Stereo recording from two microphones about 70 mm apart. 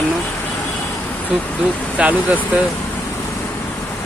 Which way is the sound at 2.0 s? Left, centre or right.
Centre.